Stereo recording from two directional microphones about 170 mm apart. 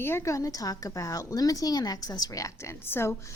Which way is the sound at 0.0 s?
15° left (ahead or behind).